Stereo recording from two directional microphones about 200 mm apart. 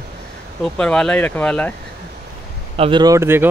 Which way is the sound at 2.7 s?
25° right (ahead or behind).